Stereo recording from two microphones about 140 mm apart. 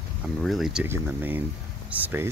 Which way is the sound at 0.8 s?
15° right (ahead or behind).